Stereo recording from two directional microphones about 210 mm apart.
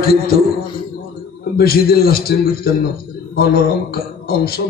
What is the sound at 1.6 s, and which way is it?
A man's voice, 45° left (ahead or behind).